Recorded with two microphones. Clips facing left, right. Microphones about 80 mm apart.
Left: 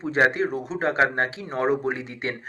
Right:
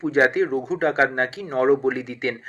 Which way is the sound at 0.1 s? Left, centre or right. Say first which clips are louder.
Right 2 dB; left.